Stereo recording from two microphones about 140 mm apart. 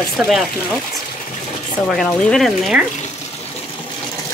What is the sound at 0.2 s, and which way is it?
Speech, 5° right (ahead or behind).